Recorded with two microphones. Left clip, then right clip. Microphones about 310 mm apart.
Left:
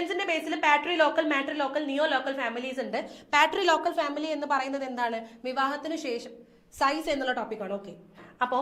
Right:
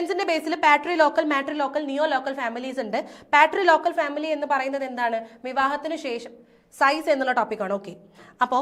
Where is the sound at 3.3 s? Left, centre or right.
Centre.